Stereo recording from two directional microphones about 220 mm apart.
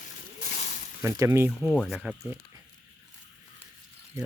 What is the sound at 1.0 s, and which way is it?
Speech, 15° right (ahead or behind).